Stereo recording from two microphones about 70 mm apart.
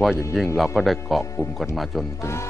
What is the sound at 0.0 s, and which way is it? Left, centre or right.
Speech, centre.